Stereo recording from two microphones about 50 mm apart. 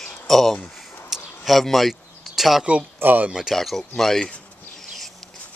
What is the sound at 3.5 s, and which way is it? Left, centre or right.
Speech, centre.